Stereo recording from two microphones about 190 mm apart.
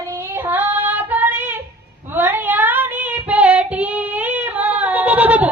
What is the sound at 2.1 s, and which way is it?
Child singing, 10° right (ahead or behind).